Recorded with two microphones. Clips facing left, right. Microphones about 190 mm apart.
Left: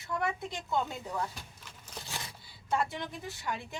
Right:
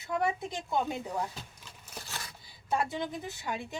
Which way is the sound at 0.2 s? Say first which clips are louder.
Right 4 dB; 20° right (ahead or behind).